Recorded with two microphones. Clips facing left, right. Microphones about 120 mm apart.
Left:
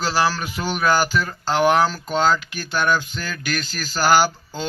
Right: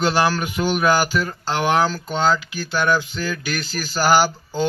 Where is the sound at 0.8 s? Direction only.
10° right (ahead or behind).